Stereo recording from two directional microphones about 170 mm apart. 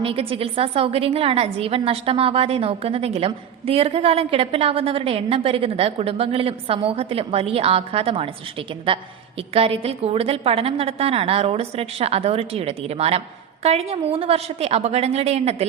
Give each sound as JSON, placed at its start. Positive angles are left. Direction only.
{"t": 0.0, "sound": "a woman's voice", "side_deg": -35}